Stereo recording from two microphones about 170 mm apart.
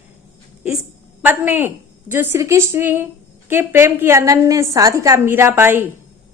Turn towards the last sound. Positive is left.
turn(degrees=-15)  # may be behind; listen again after turning